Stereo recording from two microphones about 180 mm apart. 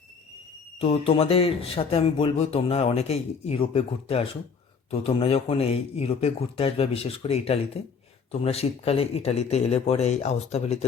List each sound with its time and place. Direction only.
0.8 s speech: 35° left (ahead or behind)